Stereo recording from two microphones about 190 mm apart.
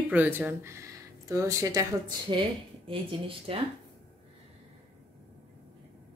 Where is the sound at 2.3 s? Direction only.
25° right (ahead or behind).